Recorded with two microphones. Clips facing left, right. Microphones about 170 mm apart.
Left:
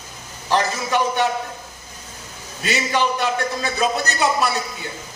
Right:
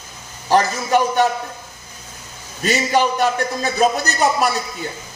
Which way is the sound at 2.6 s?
45° right (ahead or behind).